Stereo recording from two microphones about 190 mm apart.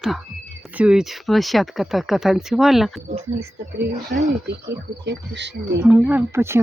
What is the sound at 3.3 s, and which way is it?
Speech, 55° right (ahead or behind).